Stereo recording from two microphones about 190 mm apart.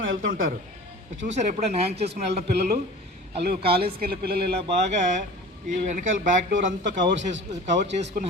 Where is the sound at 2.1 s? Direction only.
60° right (ahead or behind).